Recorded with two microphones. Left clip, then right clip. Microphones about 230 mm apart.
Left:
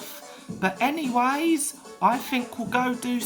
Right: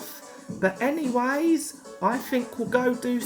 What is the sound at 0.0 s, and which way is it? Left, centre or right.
Speech, centre.